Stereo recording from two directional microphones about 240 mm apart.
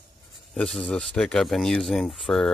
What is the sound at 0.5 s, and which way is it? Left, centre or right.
Speech, centre.